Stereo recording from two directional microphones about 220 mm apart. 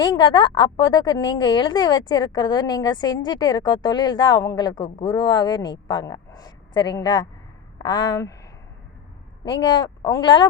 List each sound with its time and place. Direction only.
0.0 s a woman's voice: 20° left (ahead or behind)
9.5 s a woman's voice: 20° left (ahead or behind)